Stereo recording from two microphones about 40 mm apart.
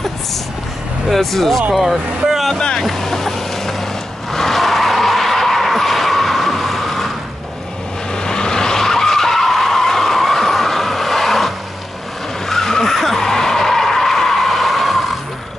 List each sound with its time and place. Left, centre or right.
1.1 s speech: centre
2.5 s speech: centre
2.9 s vehicle: centre
4.3 s skidding: centre
8.1 s vehicle: centre
12.4 s skidding: centre